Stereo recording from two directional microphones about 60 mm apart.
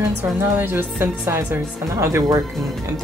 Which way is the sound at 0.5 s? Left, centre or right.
Right.